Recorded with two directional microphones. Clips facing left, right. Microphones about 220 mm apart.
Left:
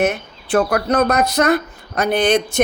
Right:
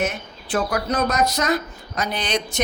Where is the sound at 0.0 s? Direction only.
60° left (ahead or behind).